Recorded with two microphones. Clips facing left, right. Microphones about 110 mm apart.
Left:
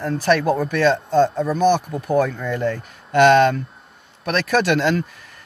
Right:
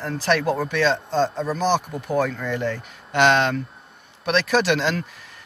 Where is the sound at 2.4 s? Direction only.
45° left (ahead or behind).